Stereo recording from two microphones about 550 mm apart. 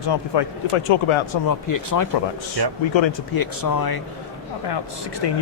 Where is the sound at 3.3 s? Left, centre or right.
Left.